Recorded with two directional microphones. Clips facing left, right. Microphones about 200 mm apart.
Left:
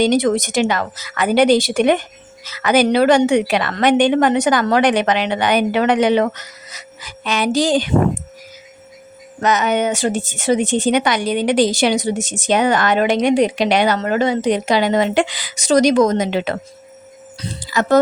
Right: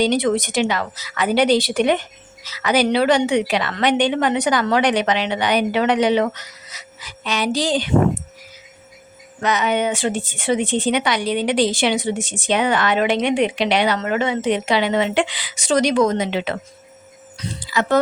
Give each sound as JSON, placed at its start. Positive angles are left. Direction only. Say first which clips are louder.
{"t": 0.0, "sound": "a woman's voice", "louder": "left 3 dB", "side_deg": 45}
{"t": 9.4, "sound": "a woman's voice", "louder": "left 3 dB", "side_deg": 45}
{"t": 17.3, "sound": "speech", "louder": "left 2 dB", "side_deg": 35}